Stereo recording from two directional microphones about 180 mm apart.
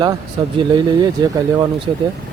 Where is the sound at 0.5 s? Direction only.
25° right (ahead or behind).